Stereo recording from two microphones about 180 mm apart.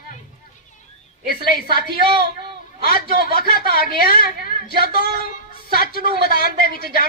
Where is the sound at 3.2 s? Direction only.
55° left (ahead or behind).